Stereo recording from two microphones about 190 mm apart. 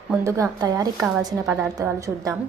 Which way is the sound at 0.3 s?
15° right (ahead or behind).